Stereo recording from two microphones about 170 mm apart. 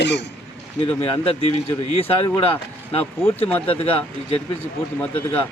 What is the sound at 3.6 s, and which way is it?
Speech, 35° left (ahead or behind).